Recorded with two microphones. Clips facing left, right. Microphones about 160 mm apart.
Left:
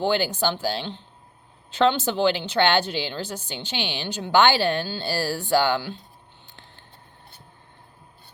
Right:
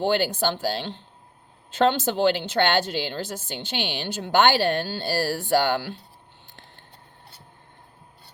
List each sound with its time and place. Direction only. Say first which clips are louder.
0.1 s a woman's voice: even; 50° right (ahead or behind)